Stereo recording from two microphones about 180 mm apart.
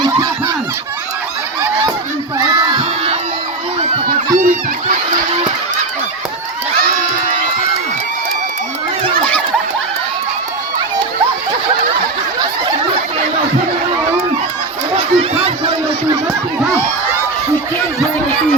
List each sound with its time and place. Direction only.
0.0 s snicker: 20° right (ahead or behind)
2.5 s crowd: 20° right (ahead or behind)
4.4 s a sound: 50° right (ahead or behind)
14.9 s chatter: 35° right (ahead or behind)